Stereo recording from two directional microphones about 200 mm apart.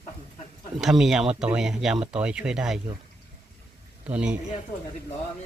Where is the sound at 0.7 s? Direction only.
Centre (ahead or behind).